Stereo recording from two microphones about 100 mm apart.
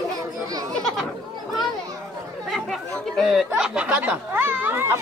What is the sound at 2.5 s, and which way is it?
Speech, centre (ahead or behind).